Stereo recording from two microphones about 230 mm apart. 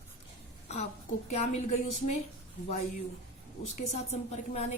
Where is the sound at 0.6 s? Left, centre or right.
Left.